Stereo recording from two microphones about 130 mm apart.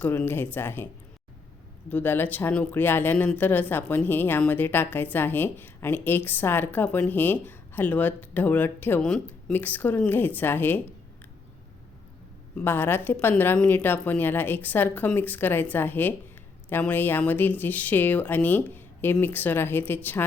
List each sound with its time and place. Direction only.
0.0 s speech: 15° left (ahead or behind)
1.9 s speech: 15° left (ahead or behind)
12.5 s speech: 15° left (ahead or behind)